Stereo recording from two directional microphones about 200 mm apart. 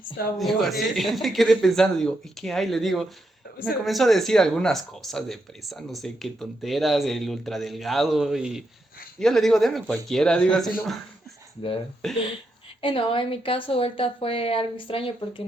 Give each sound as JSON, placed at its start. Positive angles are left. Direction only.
{"t": 0.3, "sound": "speech", "side_deg": 0}
{"t": 12.8, "sound": "speech", "side_deg": 25}